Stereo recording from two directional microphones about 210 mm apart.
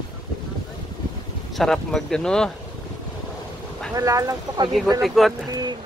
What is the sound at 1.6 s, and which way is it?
Speech, centre (ahead or behind).